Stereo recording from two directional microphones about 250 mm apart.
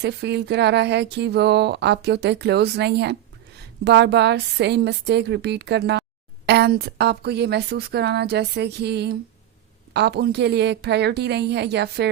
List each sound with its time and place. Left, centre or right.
0.0 s a woman's voice: right